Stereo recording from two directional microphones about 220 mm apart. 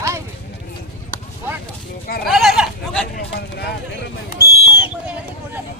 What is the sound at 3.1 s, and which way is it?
Speech, 45° left (ahead or behind).